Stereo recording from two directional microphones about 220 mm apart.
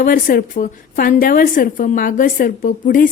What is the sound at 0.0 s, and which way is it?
A woman's voice, 40° left (ahead or behind).